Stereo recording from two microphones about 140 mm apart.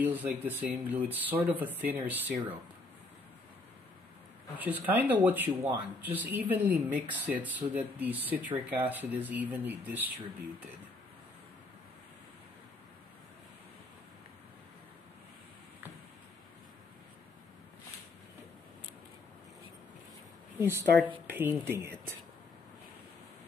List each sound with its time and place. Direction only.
0.0 s speech: 10° right (ahead or behind)
4.6 s speech: 10° right (ahead or behind)
20.5 s speech: 20° right (ahead or behind)